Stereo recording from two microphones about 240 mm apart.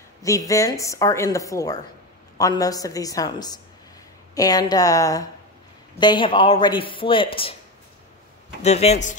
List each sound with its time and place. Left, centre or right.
0.2 s a woman's voice: centre
8.6 s speech: left